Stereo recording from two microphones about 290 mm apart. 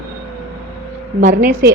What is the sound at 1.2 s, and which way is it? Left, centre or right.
Speech, right.